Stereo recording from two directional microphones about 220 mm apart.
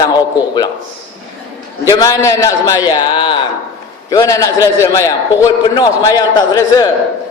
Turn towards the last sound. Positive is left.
turn(degrees=15)  # may be behind; listen again after turning